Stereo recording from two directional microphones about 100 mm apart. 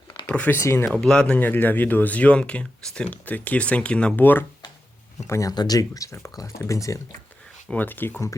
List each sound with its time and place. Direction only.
0.3 s speech: 15° left (ahead or behind)
0.6 s speech: 25° left (ahead or behind)
0.9 s speech: 5° left (ahead or behind); by 4.4 s 20° left (ahead or behind)
5.3 s speech: 35° left (ahead or behind)
7.7 s speech: 20° left (ahead or behind)